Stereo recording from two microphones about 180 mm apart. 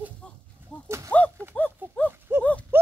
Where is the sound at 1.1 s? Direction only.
10° left (ahead or behind).